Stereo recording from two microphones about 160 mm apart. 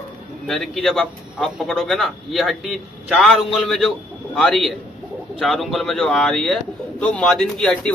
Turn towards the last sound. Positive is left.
turn(degrees=5)  # may be behind; listen again after turning